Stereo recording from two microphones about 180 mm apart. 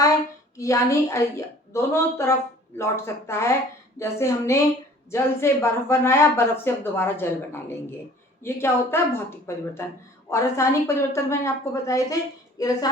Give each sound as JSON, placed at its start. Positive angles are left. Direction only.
{"t": 0.5, "sound": "speech", "side_deg": 15}